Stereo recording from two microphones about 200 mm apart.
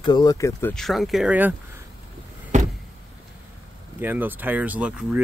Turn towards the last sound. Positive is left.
turn(degrees=-5)  # may be behind; listen again after turning